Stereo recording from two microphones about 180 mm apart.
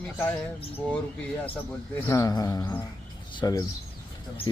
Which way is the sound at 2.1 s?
20° left (ahead or behind).